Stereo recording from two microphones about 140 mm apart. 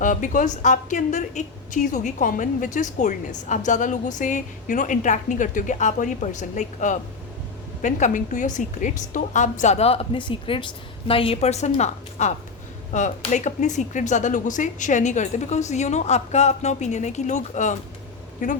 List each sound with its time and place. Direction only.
0.0 s a woman's voice: 65° left (ahead or behind)